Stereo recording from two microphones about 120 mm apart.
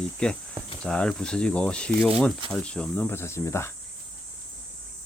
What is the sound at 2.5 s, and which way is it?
Cricket, 10° left (ahead or behind).